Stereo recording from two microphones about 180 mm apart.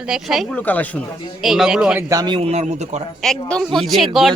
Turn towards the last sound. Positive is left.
turn(degrees=0)  # may be behind; listen again after turning